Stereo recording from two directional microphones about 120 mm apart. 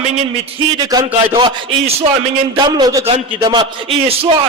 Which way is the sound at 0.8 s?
30° right (ahead or behind).